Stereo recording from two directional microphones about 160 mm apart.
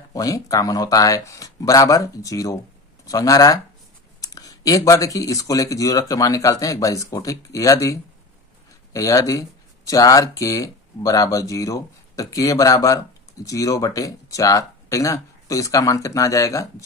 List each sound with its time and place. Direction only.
0.1 s speech: 20° left (ahead or behind)